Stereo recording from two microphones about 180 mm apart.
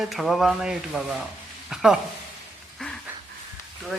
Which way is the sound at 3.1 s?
10° right (ahead or behind).